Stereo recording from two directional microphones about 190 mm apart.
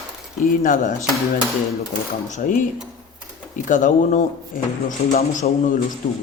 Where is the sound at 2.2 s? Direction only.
45° left (ahead or behind).